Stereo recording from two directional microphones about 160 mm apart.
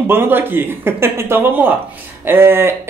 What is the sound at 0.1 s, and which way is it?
Speech, 15° right (ahead or behind).